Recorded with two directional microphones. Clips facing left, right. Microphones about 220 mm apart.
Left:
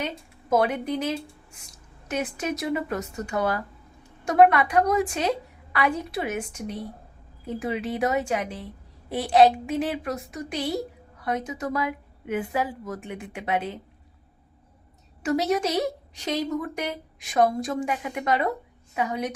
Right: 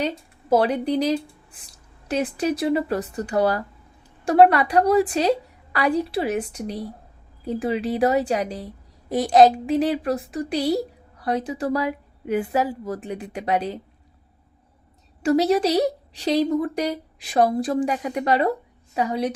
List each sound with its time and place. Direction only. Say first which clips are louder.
0.5 s a woman's voice: right 4 dB; 35° right (ahead or behind)
15.2 s a woman's voice: right 5 dB; 35° right (ahead or behind)